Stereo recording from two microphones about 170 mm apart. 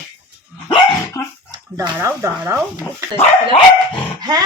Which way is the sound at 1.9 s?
15° right (ahead or behind).